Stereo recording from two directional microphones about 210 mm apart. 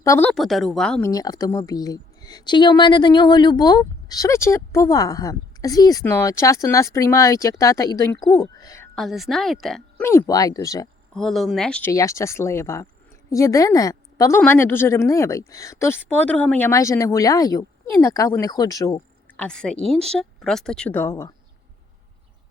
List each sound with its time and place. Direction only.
0.0 s a woman's voice: 10° left (ahead or behind)
1.1 s speech: 15° left (ahead or behind)
8.4 s a sound: 15° left (ahead or behind)
9.0 s a woman's voice: centre (ahead or behind)
10.0 s speech: 10° left (ahead or behind)
11.1 s a woman's voice: centre (ahead or behind)
11.9 s speech: 15° left (ahead or behind)
19.4 s a woman's voice: 5° left (ahead or behind)